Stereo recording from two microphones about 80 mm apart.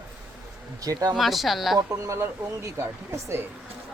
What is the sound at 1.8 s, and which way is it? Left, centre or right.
Speech, right.